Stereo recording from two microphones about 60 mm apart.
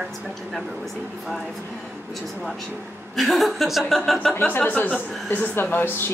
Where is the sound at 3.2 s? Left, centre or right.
Centre.